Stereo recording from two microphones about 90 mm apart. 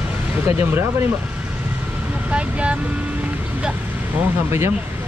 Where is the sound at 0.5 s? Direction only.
25° right (ahead or behind).